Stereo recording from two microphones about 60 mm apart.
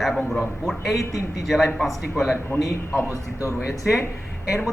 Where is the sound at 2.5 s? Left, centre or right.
Left.